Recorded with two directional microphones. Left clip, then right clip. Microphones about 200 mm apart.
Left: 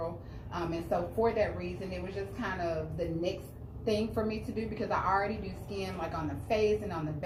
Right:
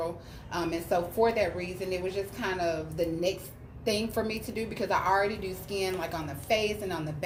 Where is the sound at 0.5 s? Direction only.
55° right (ahead or behind).